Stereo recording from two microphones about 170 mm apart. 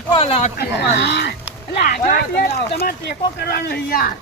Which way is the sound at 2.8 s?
70° left (ahead or behind).